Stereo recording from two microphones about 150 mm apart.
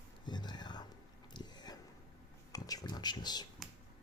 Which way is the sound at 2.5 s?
25° left (ahead or behind).